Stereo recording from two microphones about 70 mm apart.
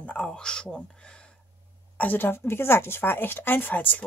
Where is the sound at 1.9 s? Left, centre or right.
Left.